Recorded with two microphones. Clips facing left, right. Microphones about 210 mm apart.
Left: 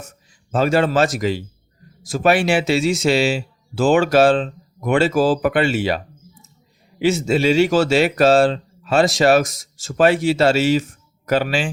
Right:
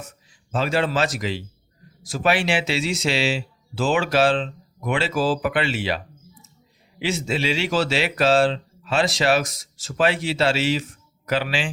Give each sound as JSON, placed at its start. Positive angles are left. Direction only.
{"t": 0.5, "sound": "speech", "side_deg": 45}
{"t": 7.0, "sound": "speech", "side_deg": 45}